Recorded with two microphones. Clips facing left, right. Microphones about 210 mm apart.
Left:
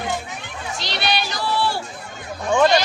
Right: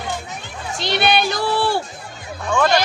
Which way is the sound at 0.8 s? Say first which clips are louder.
Right 7 dB; 55° right (ahead or behind).